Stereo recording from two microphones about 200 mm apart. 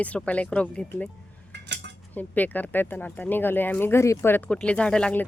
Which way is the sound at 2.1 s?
10° left (ahead or behind).